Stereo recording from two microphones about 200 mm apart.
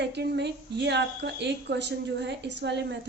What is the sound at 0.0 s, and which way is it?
A woman's voice, 60° right (ahead or behind).